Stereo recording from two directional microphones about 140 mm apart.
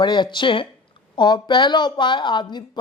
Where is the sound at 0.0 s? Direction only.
35° left (ahead or behind).